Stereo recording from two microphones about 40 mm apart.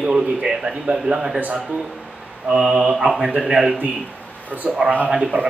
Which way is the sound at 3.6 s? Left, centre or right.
Right.